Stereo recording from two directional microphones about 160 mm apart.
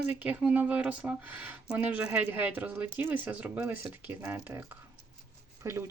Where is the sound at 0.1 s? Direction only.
10° right (ahead or behind).